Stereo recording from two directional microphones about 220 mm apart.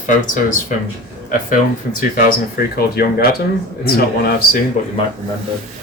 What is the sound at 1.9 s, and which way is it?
Speech, 40° left (ahead or behind).